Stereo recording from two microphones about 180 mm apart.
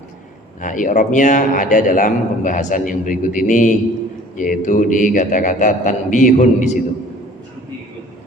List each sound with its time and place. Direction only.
0.6 s a man's voice: 45° left (ahead or behind)